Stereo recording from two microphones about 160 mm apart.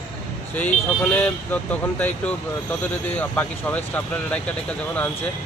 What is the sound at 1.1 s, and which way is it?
Speech, 10° left (ahead or behind).